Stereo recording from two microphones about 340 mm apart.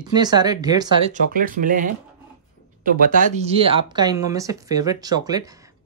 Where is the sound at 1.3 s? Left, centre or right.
Right.